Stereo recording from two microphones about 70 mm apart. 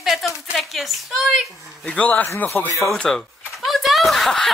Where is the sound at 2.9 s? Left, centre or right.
Centre.